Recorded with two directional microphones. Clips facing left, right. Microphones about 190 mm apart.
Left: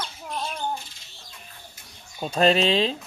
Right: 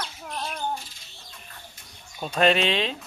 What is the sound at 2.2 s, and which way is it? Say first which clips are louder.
Speech: left 2 dB; 30° left (ahead or behind).